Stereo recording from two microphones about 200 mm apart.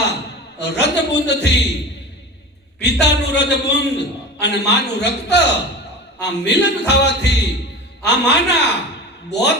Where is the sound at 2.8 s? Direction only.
60° left (ahead or behind).